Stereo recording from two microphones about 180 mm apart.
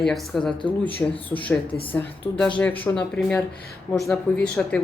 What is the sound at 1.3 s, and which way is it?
Speech, 10° left (ahead or behind).